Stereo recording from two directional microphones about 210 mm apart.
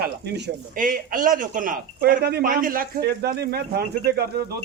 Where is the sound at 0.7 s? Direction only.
40° right (ahead or behind).